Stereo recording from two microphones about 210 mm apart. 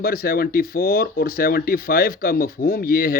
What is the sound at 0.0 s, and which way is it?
Speech, 45° left (ahead or behind).